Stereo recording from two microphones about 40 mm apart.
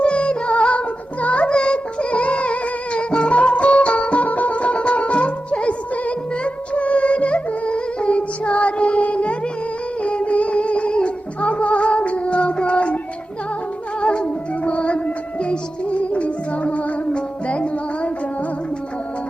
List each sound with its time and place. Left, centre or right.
0.0 s music: left
14.0 s music: left